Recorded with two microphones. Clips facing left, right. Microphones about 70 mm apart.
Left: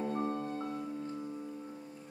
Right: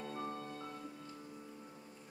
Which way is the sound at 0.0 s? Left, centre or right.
Left.